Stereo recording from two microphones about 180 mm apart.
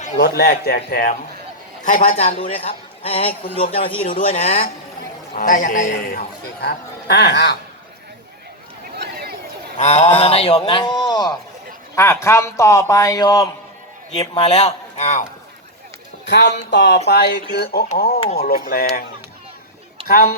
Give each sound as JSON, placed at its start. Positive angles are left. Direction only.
{"t": 0.2, "sound": "a man's voice", "side_deg": 65}
{"t": 1.8, "sound": "a man's voice", "side_deg": 45}
{"t": 2.4, "sound": "a man's voice", "side_deg": 30}
{"t": 5.4, "sound": "a man's voice", "side_deg": 50}
{"t": 9.0, "sound": "a sound", "side_deg": -60}
{"t": 9.7, "sound": "a man's voice", "side_deg": 40}
{"t": 14.3, "sound": "a man's voice", "side_deg": 35}
{"t": 16.3, "sound": "a man's voice", "side_deg": 70}
{"t": 20.1, "sound": "a man's voice", "side_deg": 55}